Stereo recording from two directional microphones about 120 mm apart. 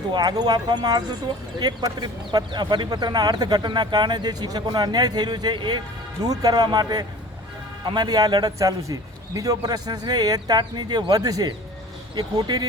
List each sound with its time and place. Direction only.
0.1 s speech: 35° right (ahead or behind)